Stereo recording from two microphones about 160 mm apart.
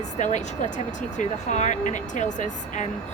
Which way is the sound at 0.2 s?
45° left (ahead or behind).